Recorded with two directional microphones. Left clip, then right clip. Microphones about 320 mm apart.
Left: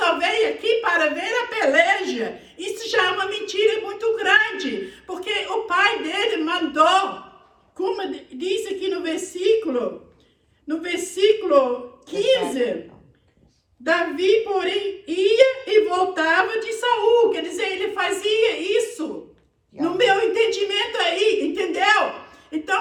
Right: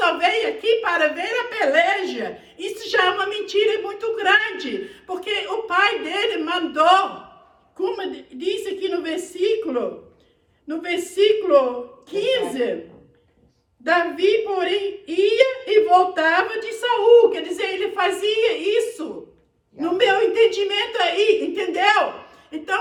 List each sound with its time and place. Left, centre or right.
0.0 s a sound: centre
5.0 s a woman's voice: centre
13.8 s a woman's voice: centre